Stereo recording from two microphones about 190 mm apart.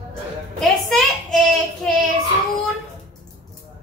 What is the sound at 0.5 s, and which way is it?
Speech, 5° left (ahead or behind).